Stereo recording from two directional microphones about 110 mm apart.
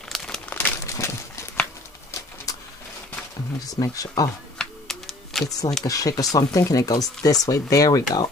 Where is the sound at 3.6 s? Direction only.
30° left (ahead or behind).